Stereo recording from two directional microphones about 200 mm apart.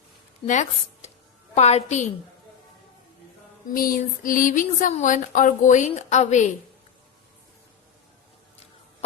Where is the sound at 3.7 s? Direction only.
45° left (ahead or behind).